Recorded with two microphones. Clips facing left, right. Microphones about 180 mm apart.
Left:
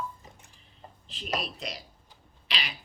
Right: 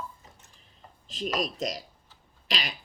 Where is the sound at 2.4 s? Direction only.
40° right (ahead or behind).